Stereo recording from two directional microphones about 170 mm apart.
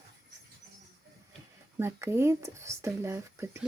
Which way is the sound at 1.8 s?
15° right (ahead or behind).